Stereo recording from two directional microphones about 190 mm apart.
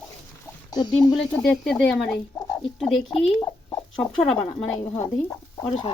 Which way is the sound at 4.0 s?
30° left (ahead or behind).